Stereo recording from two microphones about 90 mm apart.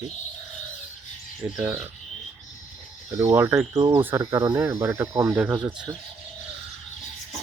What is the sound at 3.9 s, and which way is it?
Speech, 30° right (ahead or behind).